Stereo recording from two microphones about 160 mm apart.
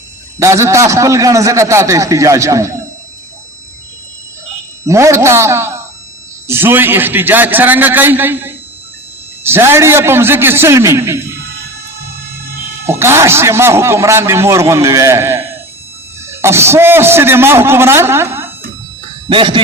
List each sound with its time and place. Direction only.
0.3 s a man's voice: 20° right (ahead or behind)
4.9 s speech: 20° right (ahead or behind)
12.8 s speech: 15° right (ahead or behind)
19.3 s speech: 35° right (ahead or behind)